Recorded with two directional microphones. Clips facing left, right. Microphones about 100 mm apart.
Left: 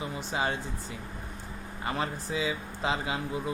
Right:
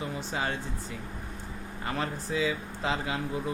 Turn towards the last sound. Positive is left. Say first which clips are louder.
# even
turn(degrees=15)  # may be behind; listen again after turning